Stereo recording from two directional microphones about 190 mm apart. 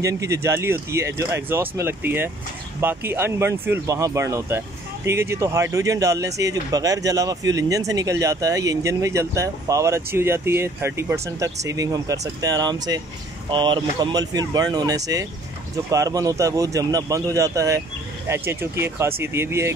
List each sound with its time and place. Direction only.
0.0 s speech: 15° right (ahead or behind)